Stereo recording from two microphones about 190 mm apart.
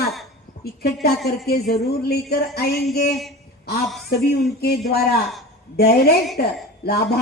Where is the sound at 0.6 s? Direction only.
55° left (ahead or behind).